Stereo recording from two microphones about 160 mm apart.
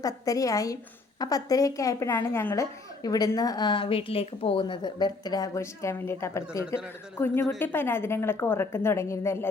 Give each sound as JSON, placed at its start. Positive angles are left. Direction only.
{"t": 0.0, "sound": "a woman's voice", "side_deg": 20}